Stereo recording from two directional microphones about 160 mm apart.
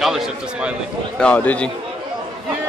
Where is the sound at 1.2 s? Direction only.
10° left (ahead or behind).